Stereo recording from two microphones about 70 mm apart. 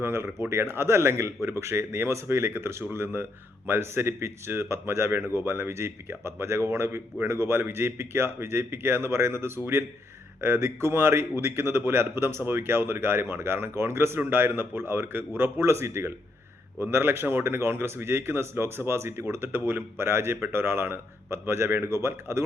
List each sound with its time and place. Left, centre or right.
0.0 s speech: right